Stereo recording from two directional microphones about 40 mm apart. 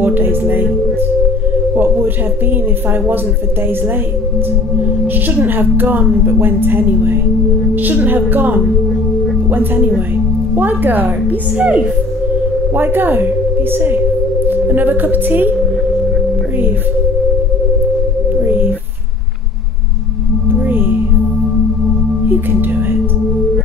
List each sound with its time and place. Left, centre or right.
0.0 s music: right
5.3 s speech: right
6.4 s a woman's voice: right
9.8 s speech: right
11.5 s speech: right
12.7 s a woman's voice: right
14.5 s speech: right
18.4 s a sound: right
20.6 s singing bowl: right